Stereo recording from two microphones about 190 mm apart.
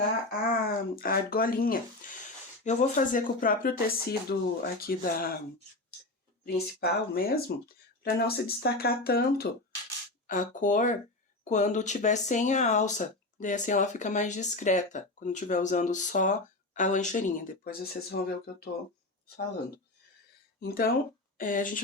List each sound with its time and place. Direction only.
0.5 s speech: 50° left (ahead or behind)
6.4 s speech: 55° left (ahead or behind)
10.2 s speech: 40° left (ahead or behind)
20.6 s speech: 50° left (ahead or behind)